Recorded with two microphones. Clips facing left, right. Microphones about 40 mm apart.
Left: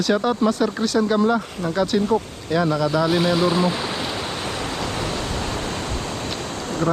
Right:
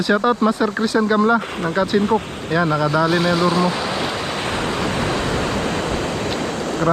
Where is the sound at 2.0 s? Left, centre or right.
Right.